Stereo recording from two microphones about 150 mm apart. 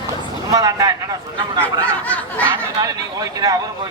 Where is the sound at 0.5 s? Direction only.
25° right (ahead or behind).